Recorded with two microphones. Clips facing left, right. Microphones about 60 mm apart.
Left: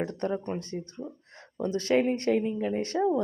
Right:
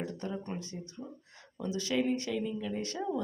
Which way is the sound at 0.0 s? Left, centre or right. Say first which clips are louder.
Left 7 dB; left.